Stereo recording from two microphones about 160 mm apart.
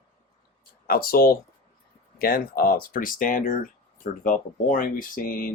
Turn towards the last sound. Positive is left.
turn(degrees=65)  # may be behind; listen again after turning